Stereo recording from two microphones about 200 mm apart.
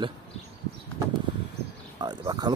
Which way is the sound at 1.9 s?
20° right (ahead or behind).